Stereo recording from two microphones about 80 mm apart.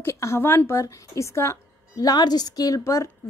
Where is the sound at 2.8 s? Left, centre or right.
Left.